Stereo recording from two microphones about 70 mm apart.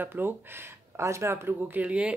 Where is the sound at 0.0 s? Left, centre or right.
Right.